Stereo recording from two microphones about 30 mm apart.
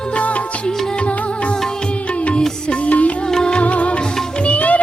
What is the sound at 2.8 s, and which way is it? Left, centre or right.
Music, left.